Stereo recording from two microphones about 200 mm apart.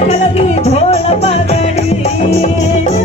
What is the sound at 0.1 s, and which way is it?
Music, 30° left (ahead or behind).